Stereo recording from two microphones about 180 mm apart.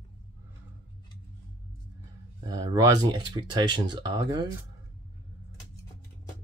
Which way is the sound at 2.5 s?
20° right (ahead or behind).